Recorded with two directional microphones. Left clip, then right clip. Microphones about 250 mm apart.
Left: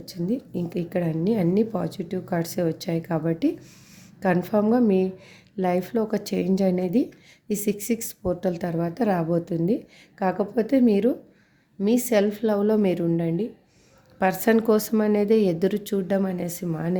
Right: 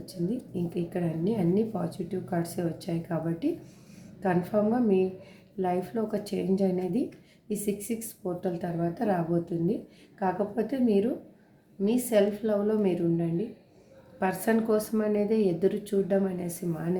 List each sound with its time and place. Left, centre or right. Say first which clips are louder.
0.1 s speech: left 5 dB; left